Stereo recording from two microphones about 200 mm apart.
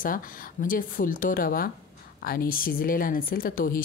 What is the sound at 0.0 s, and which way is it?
Speech, 45° left (ahead or behind).